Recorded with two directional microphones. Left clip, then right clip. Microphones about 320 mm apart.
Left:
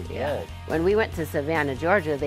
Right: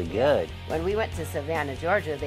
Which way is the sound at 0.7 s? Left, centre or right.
Left.